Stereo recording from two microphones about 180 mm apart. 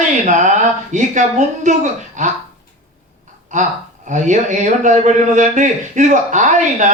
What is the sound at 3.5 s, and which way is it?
Speech, 45° right (ahead or behind).